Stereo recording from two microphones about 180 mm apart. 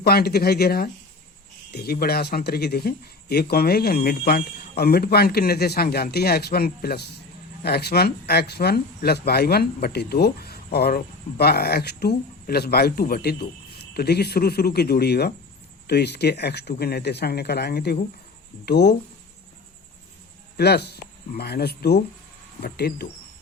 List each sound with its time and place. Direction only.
0.0 s speech: 60° left (ahead or behind)
20.6 s speech: 65° left (ahead or behind)